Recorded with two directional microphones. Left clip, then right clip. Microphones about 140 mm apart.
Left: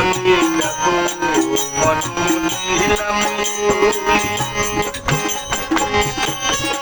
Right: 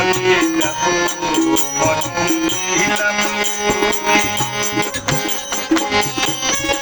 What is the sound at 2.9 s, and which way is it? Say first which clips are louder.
Music: even; 35° right (ahead or behind).